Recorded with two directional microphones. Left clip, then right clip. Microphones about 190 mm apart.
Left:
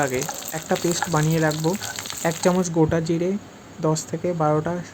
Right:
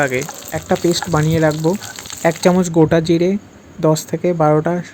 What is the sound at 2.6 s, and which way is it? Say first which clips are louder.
Speech: right 7 dB; 20° right (ahead or behind).